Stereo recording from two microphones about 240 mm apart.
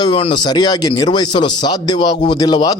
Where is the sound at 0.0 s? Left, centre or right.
Left.